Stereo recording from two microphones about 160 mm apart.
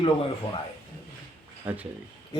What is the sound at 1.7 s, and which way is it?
Speech, 10° right (ahead or behind).